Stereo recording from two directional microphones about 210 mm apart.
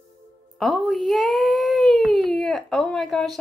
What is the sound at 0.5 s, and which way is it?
Speech, centre (ahead or behind).